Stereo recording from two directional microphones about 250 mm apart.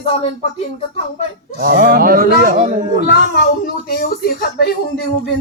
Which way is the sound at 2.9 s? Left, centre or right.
Left.